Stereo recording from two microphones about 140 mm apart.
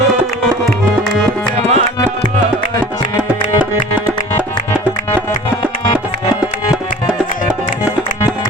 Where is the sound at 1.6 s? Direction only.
50° right (ahead or behind).